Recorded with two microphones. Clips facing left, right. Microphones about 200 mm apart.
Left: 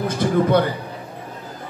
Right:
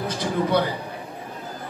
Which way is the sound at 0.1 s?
55° left (ahead or behind).